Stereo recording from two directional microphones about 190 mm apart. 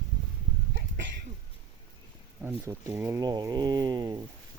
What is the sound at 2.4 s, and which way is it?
Speech, 10° right (ahead or behind).